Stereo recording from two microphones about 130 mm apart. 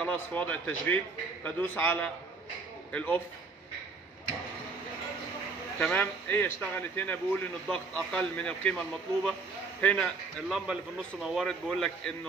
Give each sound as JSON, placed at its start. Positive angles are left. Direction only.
{"t": 0.0, "sound": "a man's voice", "side_deg": 10}
{"t": 5.8, "sound": "a man's voice", "side_deg": 15}